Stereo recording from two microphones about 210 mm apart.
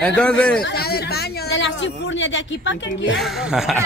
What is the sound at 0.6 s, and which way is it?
Speech, 50° left (ahead or behind).